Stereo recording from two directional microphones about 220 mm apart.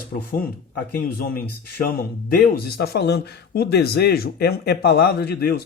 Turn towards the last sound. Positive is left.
turn(degrees=45)  # may be behind; listen again after turning